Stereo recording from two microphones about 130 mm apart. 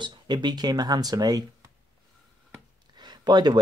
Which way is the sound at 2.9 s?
35° right (ahead or behind).